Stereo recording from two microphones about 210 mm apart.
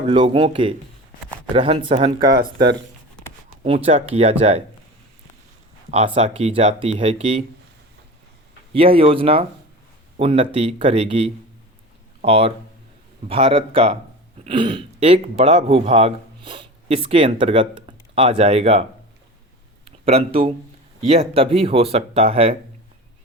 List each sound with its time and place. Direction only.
0.1 s speech: 25° right (ahead or behind)
3.8 s speech: 30° right (ahead or behind)
6.1 s speech: 30° right (ahead or behind)
8.7 s speech: 25° right (ahead or behind)